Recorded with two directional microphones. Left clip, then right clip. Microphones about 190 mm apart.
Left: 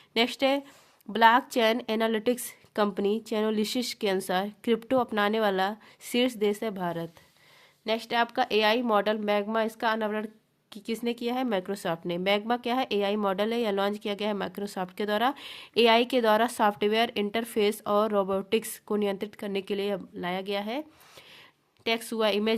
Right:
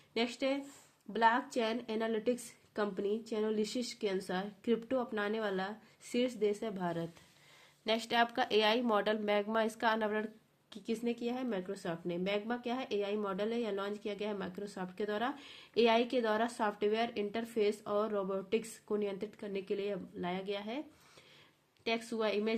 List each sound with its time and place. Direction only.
0.1 s speech: 40° left (ahead or behind)